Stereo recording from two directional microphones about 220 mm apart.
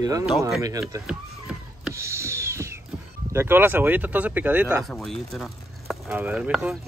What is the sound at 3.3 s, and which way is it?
Speech, 10° right (ahead or behind).